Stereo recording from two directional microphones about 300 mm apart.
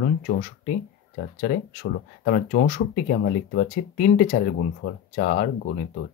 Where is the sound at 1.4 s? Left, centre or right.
Left.